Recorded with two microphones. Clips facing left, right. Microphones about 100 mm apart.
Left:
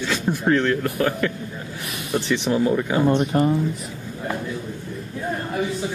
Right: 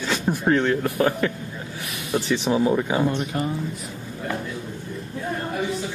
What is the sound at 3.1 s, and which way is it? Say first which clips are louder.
Speech: left 7 dB; 40° left (ahead or behind).